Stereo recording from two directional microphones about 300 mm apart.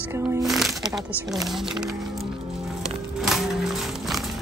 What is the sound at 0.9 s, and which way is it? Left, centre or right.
Speech, centre.